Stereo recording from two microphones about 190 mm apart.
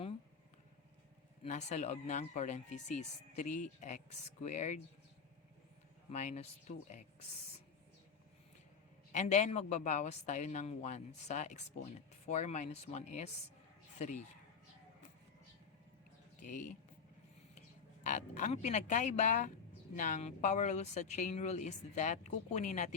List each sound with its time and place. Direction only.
1.5 s speech: 35° left (ahead or behind)
6.1 s speech: 35° left (ahead or behind)
9.1 s speech: 40° left (ahead or behind)
16.4 s speech: 40° left (ahead or behind)
18.0 s speech: 40° left (ahead or behind)